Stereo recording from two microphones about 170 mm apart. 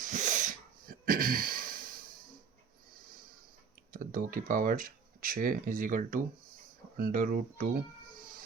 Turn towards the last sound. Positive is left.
turn(degrees=-55)  # may be behind; listen again after turning